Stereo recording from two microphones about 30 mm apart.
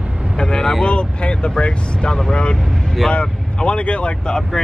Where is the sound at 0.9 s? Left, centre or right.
Left.